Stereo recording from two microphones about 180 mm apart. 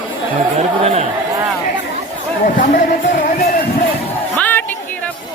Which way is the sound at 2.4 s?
45° left (ahead or behind).